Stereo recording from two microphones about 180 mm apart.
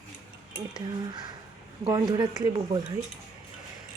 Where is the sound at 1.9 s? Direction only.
25° right (ahead or behind).